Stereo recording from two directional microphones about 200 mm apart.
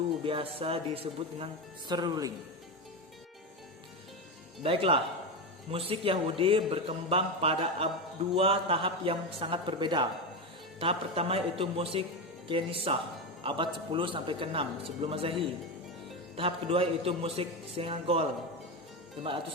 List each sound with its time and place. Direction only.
0.3 s speech: 30° right (ahead or behind)
4.6 s speech: 30° right (ahead or behind)